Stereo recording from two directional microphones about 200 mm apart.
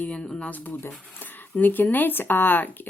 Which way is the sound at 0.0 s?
5° left (ahead or behind).